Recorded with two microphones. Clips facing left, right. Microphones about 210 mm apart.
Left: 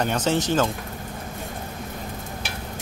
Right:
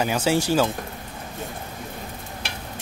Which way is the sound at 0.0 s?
5° right (ahead or behind).